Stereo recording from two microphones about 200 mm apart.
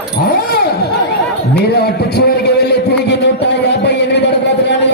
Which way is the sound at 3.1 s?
60° left (ahead or behind).